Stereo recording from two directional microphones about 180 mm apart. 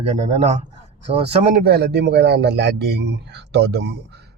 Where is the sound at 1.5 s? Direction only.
60° right (ahead or behind).